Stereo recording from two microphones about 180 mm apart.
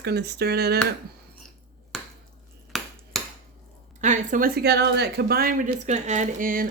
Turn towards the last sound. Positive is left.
turn(degrees=-50)  # may be behind; listen again after turning